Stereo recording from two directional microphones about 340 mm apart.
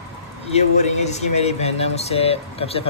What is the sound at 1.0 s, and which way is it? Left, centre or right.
Speech, centre.